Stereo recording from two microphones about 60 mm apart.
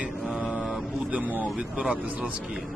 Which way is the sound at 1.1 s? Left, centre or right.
Right.